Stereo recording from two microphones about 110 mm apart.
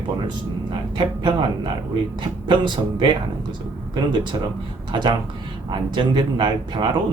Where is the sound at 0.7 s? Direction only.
50° right (ahead or behind).